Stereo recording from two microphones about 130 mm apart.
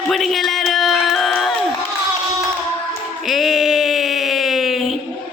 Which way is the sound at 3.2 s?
Centre (ahead or behind).